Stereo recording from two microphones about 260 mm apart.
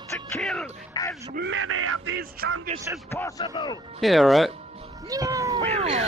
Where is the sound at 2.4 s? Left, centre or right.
Right.